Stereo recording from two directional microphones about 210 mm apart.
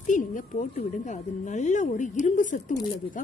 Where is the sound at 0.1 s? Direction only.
35° left (ahead or behind).